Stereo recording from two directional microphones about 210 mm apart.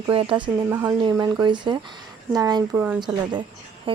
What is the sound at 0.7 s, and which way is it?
Speech, 10° right (ahead or behind).